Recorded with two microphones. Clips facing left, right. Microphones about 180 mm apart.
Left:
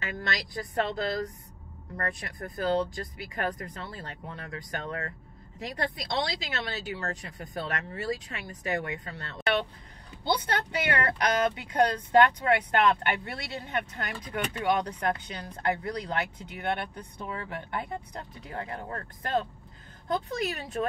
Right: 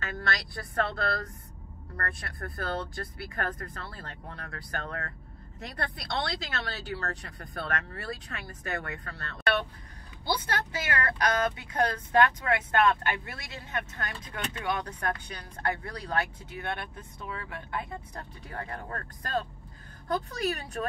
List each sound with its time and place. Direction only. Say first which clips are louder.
0.0 s speech: even; 15° left (ahead or behind)
14.1 s speech: left 4 dB; 15° left (ahead or behind)
14.9 s speech: left 3 dB; 25° left (ahead or behind)